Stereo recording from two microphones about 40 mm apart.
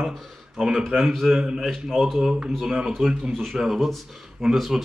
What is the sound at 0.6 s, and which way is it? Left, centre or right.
Speech, centre.